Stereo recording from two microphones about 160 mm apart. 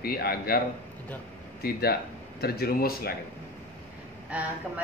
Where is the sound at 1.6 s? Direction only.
75° left (ahead or behind).